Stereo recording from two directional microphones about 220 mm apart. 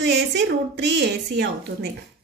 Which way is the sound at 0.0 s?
50° right (ahead or behind).